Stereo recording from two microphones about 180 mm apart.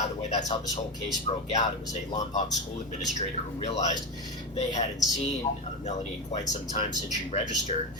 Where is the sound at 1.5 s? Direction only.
40° left (ahead or behind).